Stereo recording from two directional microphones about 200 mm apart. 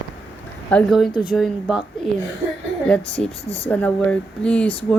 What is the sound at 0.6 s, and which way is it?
Speech, 5° left (ahead or behind).